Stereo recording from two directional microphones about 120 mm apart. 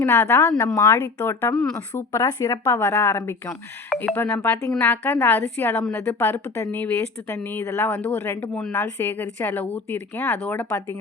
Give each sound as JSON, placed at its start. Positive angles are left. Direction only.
{"t": 0.0, "sound": "a woman's voice", "side_deg": 20}